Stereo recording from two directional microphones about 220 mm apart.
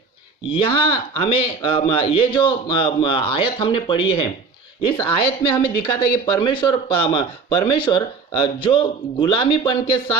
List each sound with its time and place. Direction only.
0.5 s a man's voice: 20° left (ahead or behind)